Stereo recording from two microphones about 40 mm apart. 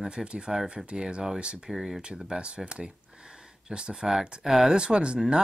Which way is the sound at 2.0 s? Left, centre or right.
Right.